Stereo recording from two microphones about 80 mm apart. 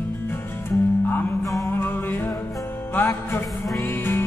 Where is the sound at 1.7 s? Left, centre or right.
Left.